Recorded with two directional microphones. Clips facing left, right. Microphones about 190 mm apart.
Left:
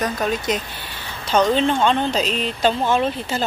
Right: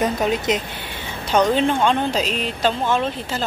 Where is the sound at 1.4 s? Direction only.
5° right (ahead or behind).